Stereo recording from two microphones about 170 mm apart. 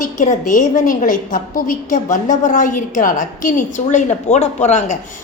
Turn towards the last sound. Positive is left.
turn(degrees=45)  # may be behind; listen again after turning